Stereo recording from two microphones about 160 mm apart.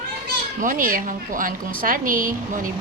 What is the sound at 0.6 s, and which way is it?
A woman's voice, 55° right (ahead or behind).